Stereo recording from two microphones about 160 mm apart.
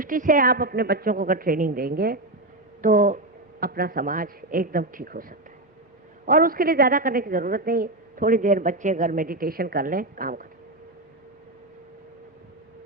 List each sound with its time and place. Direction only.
0.0 s a woman's voice: 55° right (ahead or behind)
2.8 s a woman's voice: 55° right (ahead or behind)
3.6 s a woman's voice: 70° right (ahead or behind)